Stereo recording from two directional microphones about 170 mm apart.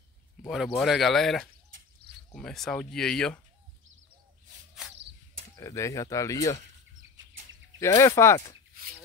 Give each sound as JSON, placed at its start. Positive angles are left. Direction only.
{"t": 0.4, "sound": "speech", "side_deg": 0}
{"t": 5.6, "sound": "speech", "side_deg": 20}
{"t": 7.8, "sound": "speech", "side_deg": 15}